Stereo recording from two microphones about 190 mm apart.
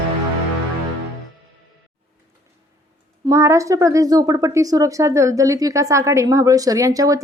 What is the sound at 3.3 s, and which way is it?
Speech, 15° right (ahead or behind).